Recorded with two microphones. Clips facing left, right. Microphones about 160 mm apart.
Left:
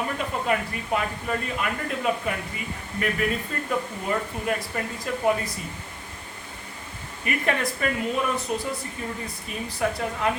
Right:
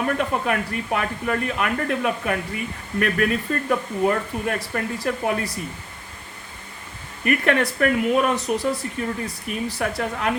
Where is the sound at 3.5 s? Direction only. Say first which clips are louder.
Right 5 dB; 70° right (ahead or behind).